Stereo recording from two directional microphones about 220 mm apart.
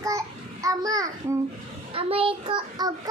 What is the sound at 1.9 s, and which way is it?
A child's voice, 25° right (ahead or behind).